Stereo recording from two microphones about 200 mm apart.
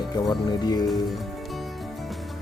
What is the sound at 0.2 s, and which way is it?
Speech, 20° left (ahead or behind).